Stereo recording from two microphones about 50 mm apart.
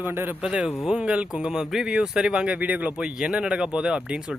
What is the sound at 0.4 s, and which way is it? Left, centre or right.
Speech, centre.